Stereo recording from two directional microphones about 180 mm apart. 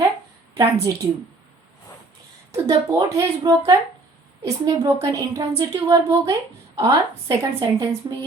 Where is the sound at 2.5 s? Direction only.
20° right (ahead or behind).